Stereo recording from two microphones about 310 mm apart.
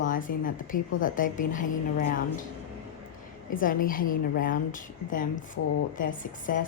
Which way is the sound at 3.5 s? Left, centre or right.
Left.